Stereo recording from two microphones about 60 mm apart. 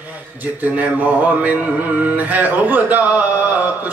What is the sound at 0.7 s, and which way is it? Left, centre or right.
Mantra, right.